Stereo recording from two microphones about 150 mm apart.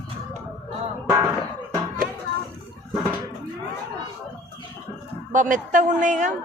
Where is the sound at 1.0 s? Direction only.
20° right (ahead or behind).